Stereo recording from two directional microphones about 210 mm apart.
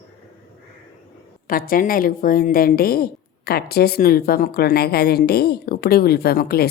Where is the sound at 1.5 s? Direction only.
45° left (ahead or behind).